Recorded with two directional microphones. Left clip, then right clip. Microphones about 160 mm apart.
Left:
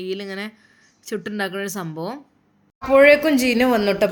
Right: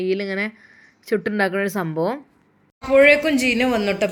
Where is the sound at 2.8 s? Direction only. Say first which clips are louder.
Left 1 dB; 15° left (ahead or behind).